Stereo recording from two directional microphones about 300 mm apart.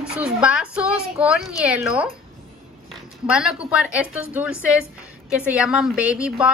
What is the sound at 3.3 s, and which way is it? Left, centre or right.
A woman's voice, centre.